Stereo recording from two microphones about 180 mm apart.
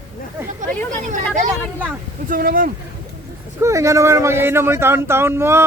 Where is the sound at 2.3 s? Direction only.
50° right (ahead or behind).